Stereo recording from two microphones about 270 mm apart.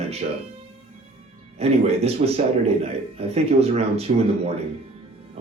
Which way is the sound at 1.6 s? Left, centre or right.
Right.